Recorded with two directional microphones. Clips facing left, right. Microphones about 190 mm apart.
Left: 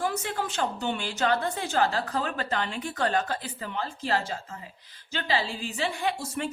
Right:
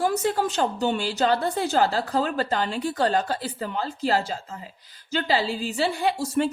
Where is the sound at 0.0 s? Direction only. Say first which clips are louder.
Right 7 dB; 40° right (ahead or behind).